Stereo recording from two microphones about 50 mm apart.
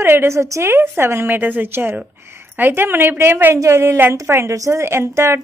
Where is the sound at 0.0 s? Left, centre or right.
Right.